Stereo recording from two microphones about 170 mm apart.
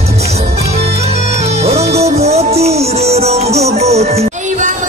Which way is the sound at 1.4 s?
40° right (ahead or behind).